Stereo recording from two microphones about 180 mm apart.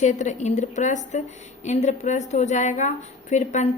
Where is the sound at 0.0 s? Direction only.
40° left (ahead or behind).